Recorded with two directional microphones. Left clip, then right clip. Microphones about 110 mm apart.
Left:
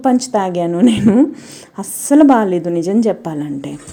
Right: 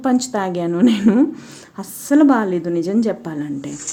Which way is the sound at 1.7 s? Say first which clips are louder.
Left 4 dB; 30° left (ahead or behind).